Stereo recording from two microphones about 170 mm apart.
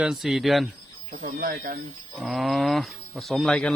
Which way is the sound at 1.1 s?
55° right (ahead or behind).